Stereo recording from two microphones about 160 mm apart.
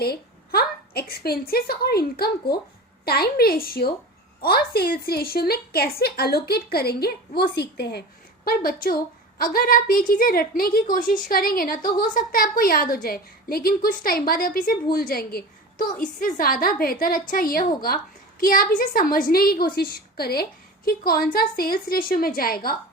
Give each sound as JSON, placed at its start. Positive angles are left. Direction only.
{"t": 0.0, "sound": "a woman's voice", "side_deg": 75}
{"t": 8.4, "sound": "a woman's voice", "side_deg": 70}